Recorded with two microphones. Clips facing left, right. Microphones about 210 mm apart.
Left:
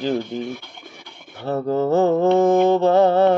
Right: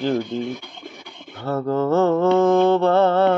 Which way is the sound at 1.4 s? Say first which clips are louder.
Left 1 dB; 20° left (ahead or behind).